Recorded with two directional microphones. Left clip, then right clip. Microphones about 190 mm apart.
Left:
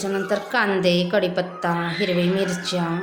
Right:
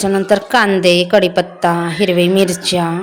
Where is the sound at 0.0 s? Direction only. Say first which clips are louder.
Right 10 dB; 40° right (ahead or behind).